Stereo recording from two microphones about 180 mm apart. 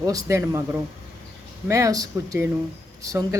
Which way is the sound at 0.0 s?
20° right (ahead or behind).